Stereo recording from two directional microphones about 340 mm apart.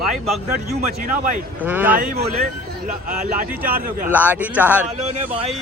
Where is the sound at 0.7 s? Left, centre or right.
Right.